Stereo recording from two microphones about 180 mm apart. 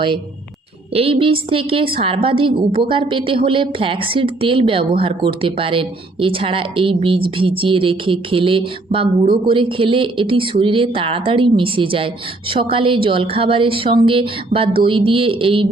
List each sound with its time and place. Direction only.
0.9 s a woman's voice: 30° right (ahead or behind)